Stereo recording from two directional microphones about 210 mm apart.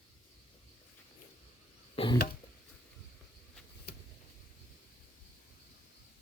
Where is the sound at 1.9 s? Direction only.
25° left (ahead or behind).